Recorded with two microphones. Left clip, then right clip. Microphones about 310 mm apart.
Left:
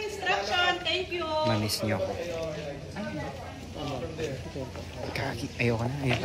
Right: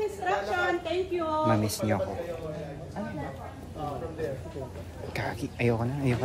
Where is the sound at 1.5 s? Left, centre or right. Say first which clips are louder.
Right 2 dB; centre.